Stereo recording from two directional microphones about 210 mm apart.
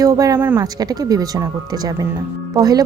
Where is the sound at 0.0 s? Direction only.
15° right (ahead or behind).